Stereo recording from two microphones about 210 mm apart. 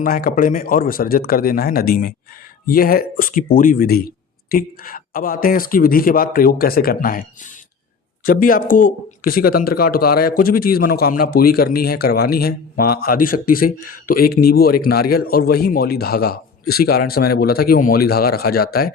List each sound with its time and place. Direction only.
0.0 s speech: 45° left (ahead or behind)